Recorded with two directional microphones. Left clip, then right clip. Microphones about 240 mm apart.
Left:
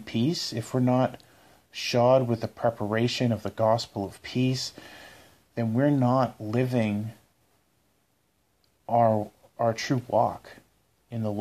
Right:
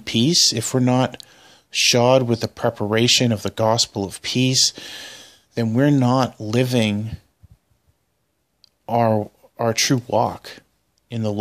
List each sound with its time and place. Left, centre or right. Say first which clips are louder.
0.0 s speech: right 12 dB; right
8.5 s speech: right 3 dB; right